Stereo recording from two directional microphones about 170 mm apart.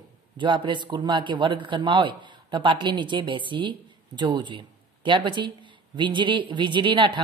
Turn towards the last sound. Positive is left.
turn(degrees=-30)  # may be behind; listen again after turning